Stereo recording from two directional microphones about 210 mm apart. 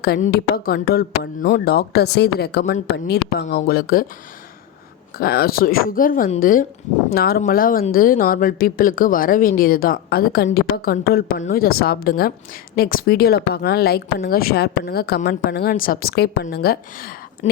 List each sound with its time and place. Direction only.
0.0 s speech: 45° left (ahead or behind)
5.1 s speech: 45° left (ahead or behind)
17.4 s speech: 35° left (ahead or behind)